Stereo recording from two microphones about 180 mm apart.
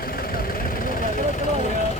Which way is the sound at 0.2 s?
55° left (ahead or behind).